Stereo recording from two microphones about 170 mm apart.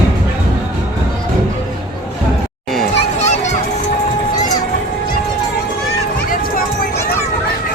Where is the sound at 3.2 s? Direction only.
45° left (ahead or behind).